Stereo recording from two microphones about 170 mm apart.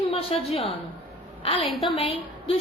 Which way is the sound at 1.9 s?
35° left (ahead or behind).